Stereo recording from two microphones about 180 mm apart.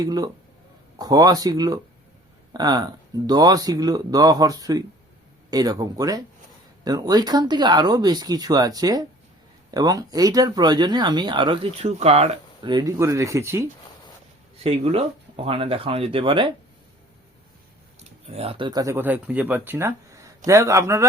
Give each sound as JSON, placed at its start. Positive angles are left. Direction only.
{"t": 0.0, "sound": "speech", "side_deg": -20}
{"t": 14.6, "sound": "speech", "side_deg": -35}
{"t": 18.3, "sound": "speech", "side_deg": -35}